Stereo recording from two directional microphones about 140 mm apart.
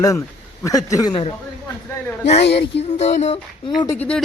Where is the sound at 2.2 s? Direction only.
50° left (ahead or behind).